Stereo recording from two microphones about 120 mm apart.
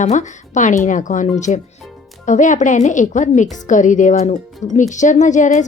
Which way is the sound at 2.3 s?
90° left.